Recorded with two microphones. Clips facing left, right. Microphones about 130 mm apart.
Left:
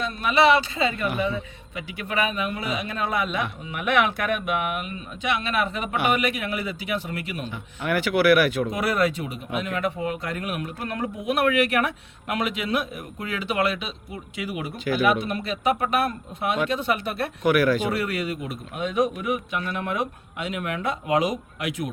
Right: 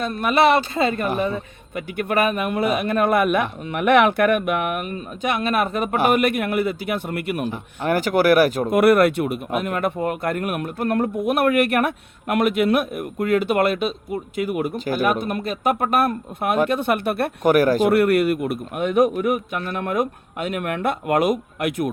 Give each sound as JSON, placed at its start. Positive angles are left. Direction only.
{"t": 0.0, "sound": "speech", "side_deg": -50}
{"t": 7.8, "sound": "speech", "side_deg": -40}
{"t": 8.7, "sound": "speech", "side_deg": -60}
{"t": 17.5, "sound": "speech", "side_deg": -40}
{"t": 17.9, "sound": "a man's voice", "side_deg": -60}